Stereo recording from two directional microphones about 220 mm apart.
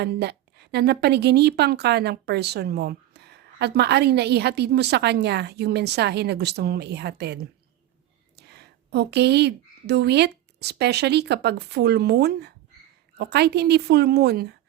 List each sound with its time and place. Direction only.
0.0 s a woman's voice: 50° right (ahead or behind)
8.4 s a woman's voice: 50° right (ahead or behind)